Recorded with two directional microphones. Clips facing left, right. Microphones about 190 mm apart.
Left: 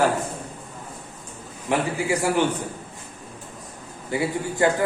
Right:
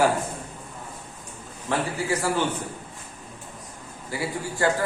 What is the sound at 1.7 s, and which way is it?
Speech, 15° left (ahead or behind).